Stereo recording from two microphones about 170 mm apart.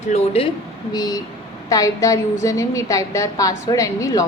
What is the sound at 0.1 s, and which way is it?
Speech, 35° left (ahead or behind).